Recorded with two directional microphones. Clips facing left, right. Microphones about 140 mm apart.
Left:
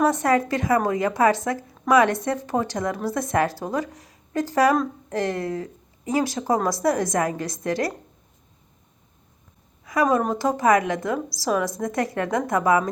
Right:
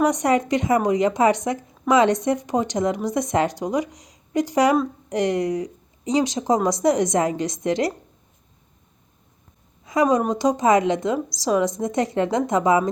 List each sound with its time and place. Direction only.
0.0 s a woman's voice: 15° right (ahead or behind)
9.8 s a woman's voice: 20° right (ahead or behind)